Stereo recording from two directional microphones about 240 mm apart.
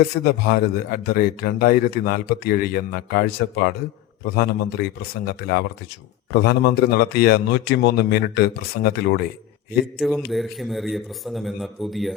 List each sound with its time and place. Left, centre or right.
0.0 s speech: left
10.0 s a man's voice: centre